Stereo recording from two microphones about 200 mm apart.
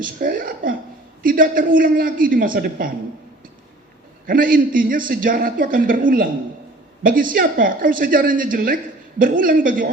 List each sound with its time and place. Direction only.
0.0 s a woman's voice: 45° right (ahead or behind)
4.3 s speech: 45° right (ahead or behind)